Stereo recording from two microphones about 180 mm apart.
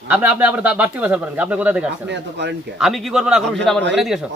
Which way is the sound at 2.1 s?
75° right (ahead or behind).